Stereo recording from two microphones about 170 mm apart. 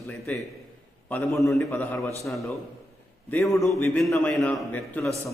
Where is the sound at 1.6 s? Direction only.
15° left (ahead or behind).